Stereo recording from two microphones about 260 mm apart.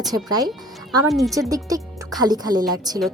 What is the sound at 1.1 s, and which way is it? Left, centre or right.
Speech, centre.